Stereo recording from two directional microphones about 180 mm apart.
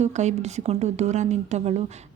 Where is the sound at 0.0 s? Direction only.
40° right (ahead or behind).